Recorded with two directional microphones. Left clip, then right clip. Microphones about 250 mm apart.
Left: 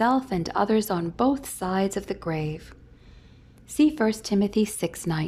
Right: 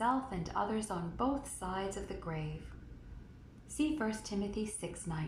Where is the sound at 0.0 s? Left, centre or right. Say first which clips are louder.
Left 11 dB; left.